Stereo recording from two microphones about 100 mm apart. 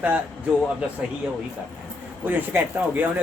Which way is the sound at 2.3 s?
20° right (ahead or behind).